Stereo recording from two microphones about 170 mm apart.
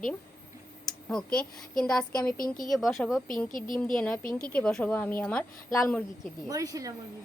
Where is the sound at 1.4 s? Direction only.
5° left (ahead or behind).